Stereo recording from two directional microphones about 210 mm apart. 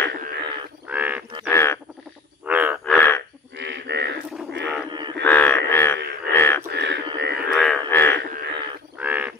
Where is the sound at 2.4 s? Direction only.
10° right (ahead or behind).